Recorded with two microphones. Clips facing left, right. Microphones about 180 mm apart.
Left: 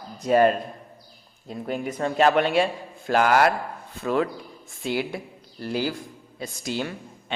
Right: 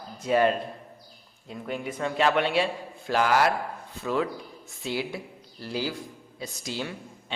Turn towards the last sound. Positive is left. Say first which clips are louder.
# left 4 dB
turn(degrees=55)  # may be behind; listen again after turning